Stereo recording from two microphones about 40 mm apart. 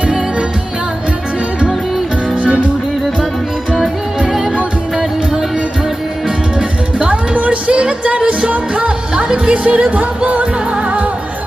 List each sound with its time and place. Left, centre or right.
4.5 s music: right
7.1 s a sound: right
8.3 s music: right